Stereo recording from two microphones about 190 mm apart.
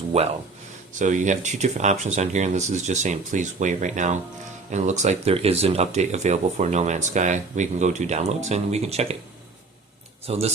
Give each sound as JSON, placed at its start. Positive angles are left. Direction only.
{"t": 0.1, "sound": "speech", "side_deg": -35}
{"t": 10.2, "sound": "speech", "side_deg": -30}